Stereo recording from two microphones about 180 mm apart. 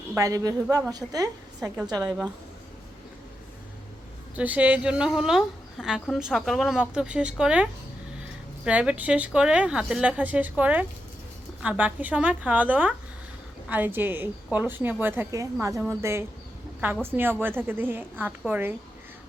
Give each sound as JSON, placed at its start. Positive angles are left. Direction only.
{"t": 0.2, "sound": "a woman's voice", "side_deg": -20}
{"t": 2.0, "sound": "a woman's voice", "side_deg": -5}
{"t": 4.4, "sound": "a woman's voice", "side_deg": -10}